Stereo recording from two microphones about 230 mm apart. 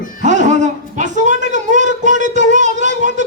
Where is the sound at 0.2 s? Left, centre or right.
Right.